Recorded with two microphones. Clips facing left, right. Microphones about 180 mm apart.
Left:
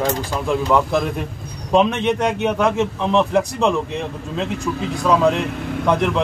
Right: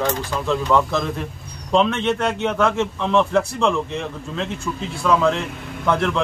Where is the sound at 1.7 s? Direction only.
15° left (ahead or behind).